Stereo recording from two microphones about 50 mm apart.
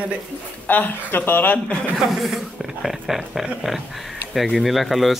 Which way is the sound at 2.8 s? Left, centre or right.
Centre.